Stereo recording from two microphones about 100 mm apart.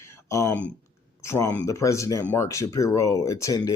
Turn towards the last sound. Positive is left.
turn(degrees=35)  # may be behind; listen again after turning